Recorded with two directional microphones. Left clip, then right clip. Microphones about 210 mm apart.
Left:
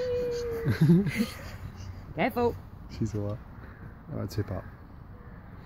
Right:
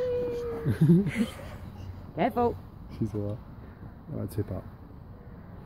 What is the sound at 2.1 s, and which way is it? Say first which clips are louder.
Speech: right 1 dB; 40° left (ahead or behind).